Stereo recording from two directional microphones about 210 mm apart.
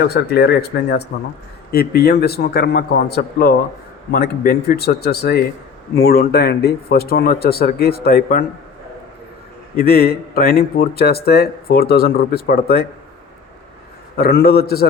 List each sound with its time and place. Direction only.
0.1 s speech: 50° left (ahead or behind)
9.7 s speech: 45° left (ahead or behind)
14.2 s speech: 50° left (ahead or behind)